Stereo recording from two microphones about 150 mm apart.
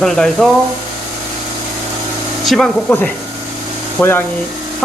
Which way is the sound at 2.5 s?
Centre (ahead or behind).